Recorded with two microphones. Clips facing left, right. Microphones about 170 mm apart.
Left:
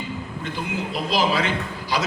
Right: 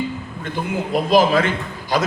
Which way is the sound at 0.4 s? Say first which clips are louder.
Right 5 dB; 50° right (ahead or behind).